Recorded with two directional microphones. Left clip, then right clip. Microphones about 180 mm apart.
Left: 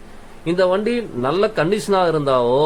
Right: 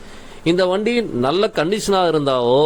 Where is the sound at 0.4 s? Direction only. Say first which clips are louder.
Even; 45° right (ahead or behind).